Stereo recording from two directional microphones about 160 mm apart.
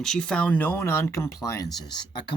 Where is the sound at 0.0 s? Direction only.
5° left (ahead or behind).